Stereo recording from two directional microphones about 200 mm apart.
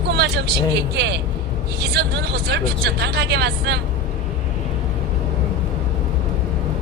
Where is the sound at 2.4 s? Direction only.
55° right (ahead or behind).